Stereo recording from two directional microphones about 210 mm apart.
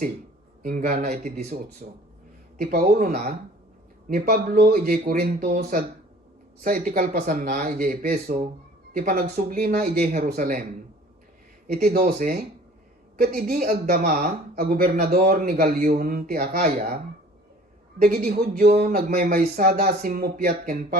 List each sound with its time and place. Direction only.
0.6 s speech: 40° right (ahead or behind)
11.7 s speech: 45° right (ahead or behind)
18.0 s speech: 45° right (ahead or behind)